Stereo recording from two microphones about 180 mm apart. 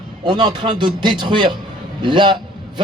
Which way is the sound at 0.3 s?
25° right (ahead or behind).